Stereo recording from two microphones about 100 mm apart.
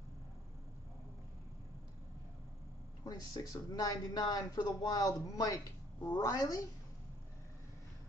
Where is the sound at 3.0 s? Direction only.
40° left (ahead or behind).